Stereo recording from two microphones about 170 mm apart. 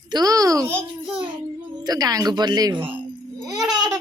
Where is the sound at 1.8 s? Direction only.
20° right (ahead or behind).